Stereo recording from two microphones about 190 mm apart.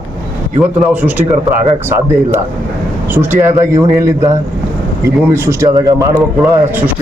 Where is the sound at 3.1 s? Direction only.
10° right (ahead or behind).